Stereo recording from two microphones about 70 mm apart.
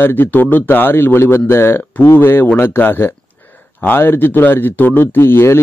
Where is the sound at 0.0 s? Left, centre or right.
Left.